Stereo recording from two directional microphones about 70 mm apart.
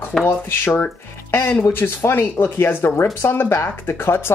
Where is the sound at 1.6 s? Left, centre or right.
Left.